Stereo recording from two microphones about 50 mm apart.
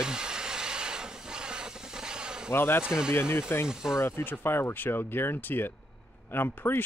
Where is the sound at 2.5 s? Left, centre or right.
Left.